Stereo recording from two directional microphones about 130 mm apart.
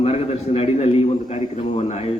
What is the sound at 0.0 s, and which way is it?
A man's voice, 50° left (ahead or behind).